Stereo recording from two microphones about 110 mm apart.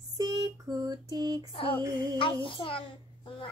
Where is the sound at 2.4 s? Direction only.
55° left (ahead or behind).